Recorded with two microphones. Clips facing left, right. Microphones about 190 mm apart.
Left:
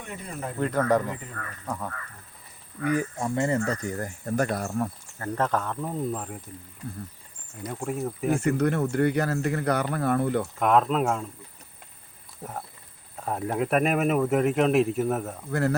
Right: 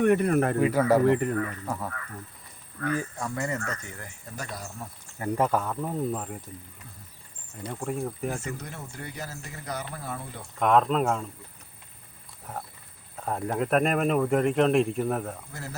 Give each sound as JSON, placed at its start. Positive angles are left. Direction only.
{"t": 0.0, "sound": "speech", "side_deg": -65}
{"t": 0.6, "sound": "speech", "side_deg": -5}
{"t": 1.0, "sound": "speech", "side_deg": -70}
{"t": 1.6, "sound": "speech", "side_deg": -5}
{"t": 2.7, "sound": "speech", "side_deg": 15}
{"t": 5.2, "sound": "speech", "side_deg": -10}
{"t": 7.7, "sound": "speech", "side_deg": 0}
{"t": 8.4, "sound": "speech", "side_deg": 60}
{"t": 10.6, "sound": "speech", "side_deg": 0}
{"t": 13.1, "sound": "speech", "side_deg": 5}